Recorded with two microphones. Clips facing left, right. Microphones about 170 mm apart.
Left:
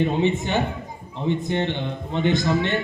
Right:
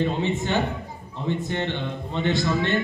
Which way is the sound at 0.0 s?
15° left (ahead or behind).